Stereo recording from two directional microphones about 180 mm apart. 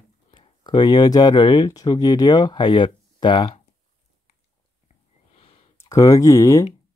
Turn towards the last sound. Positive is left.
turn(degrees=20)  # may be behind; listen again after turning